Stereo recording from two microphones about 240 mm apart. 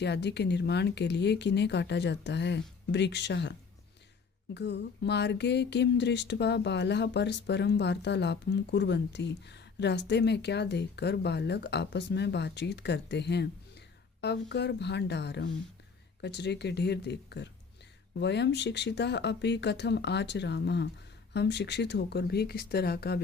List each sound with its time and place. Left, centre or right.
0.0 s speech: left